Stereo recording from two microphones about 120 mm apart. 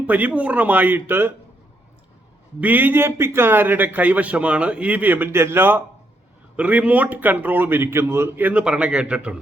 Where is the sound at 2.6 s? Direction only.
15° right (ahead or behind).